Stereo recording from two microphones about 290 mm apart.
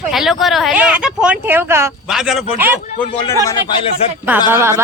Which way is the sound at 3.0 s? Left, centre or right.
Centre.